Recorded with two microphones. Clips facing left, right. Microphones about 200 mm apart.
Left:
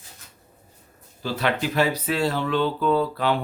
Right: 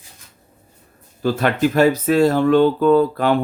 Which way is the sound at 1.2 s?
50° right (ahead or behind).